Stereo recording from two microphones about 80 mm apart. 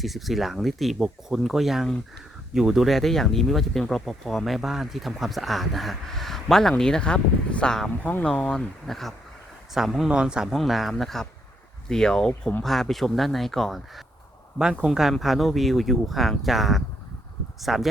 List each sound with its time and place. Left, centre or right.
0.0 s speech: centre
8.0 s speech: left
8.3 s speech: centre